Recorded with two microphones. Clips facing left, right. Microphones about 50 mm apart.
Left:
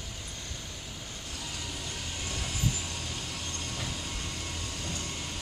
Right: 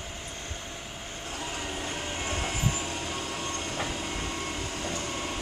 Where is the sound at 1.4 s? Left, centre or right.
Right.